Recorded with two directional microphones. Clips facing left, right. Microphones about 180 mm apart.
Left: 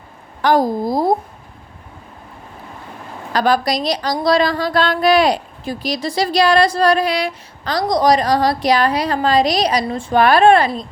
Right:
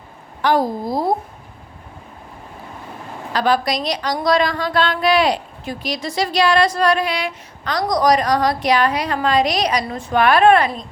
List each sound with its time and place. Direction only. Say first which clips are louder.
0.4 s a woman's voice: left 3 dB; 40° left (ahead or behind)
3.3 s a woman's voice: left 2 dB; 40° left (ahead or behind)